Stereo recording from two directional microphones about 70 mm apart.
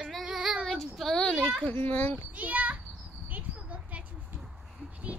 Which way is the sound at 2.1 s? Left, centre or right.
Right.